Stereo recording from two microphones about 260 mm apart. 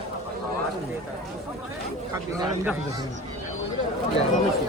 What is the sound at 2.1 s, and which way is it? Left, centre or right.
Speech, centre.